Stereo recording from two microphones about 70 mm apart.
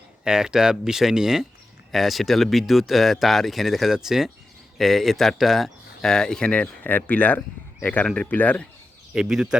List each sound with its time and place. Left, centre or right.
0.3 s speech: centre; by 8.6 s left
9.1 s speech: centre